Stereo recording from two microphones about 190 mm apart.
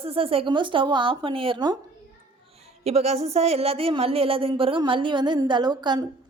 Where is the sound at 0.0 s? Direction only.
30° right (ahead or behind).